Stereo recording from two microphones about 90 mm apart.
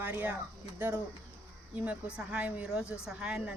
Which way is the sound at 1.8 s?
15° right (ahead or behind).